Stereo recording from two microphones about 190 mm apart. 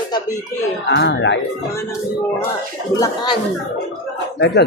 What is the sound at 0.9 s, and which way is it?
Speech, 65° left (ahead or behind).